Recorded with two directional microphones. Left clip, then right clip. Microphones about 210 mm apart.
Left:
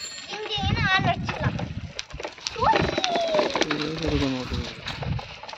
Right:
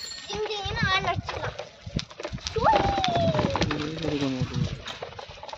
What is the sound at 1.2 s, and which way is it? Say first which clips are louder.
Clip-clop: left 3 dB; 10° left (ahead or behind).